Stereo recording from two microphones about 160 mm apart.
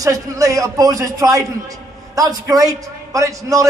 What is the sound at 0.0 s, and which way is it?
A man's voice, 20° right (ahead or behind).